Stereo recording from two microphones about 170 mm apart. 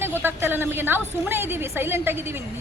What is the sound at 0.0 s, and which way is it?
A woman's voice, 10° right (ahead or behind).